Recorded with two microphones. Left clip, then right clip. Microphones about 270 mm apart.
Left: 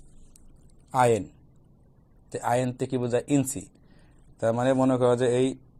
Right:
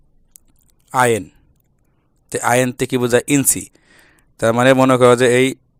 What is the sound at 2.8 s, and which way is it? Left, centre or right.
Speech, right.